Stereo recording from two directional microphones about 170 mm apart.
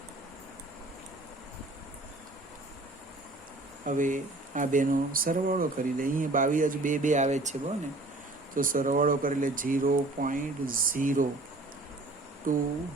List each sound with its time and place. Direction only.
3.8 s speech: 50° right (ahead or behind)
8.5 s speech: 55° right (ahead or behind)
12.5 s speech: 55° right (ahead or behind)